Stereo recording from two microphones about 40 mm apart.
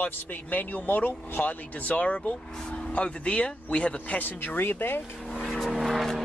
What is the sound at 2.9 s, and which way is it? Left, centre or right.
Speech, left.